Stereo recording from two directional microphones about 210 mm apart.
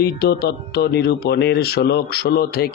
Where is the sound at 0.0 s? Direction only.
50° left (ahead or behind).